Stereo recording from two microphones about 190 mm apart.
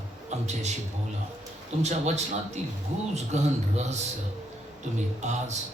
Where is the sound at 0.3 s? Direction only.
35° right (ahead or behind).